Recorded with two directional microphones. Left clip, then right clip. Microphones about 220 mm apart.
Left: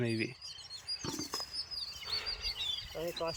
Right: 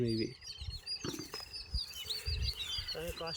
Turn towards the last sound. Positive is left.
turn(degrees=35)  # may be behind; listen again after turning